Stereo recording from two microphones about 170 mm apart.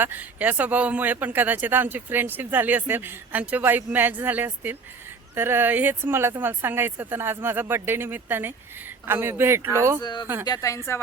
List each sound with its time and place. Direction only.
0.0 s speech: 10° right (ahead or behind)
10.0 s speech: 25° left (ahead or behind)